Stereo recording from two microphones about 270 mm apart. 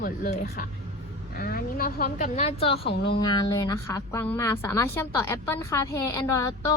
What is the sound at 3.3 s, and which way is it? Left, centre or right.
A woman's voice, centre.